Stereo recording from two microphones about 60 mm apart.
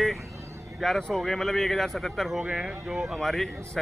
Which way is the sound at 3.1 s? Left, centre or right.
Centre.